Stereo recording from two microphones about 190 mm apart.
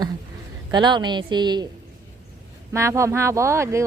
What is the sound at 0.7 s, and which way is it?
Speech, 25° right (ahead or behind).